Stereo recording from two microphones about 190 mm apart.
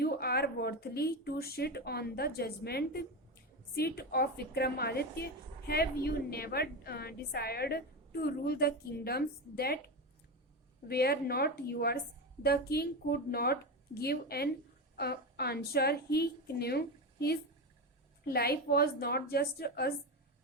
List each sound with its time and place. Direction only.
0.0 s a woman's voice: 55° left (ahead or behind)